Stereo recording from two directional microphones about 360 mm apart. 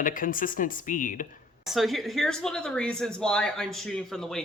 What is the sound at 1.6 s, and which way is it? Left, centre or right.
Speech, centre.